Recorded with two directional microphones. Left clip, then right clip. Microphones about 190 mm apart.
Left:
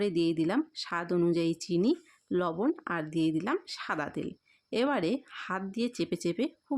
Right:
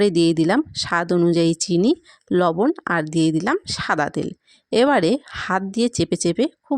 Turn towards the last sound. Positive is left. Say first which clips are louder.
# right 11 dB
turn(degrees=-40)  # may be behind; listen again after turning